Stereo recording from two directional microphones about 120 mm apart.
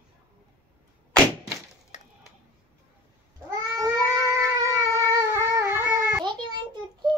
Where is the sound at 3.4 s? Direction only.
25° right (ahead or behind).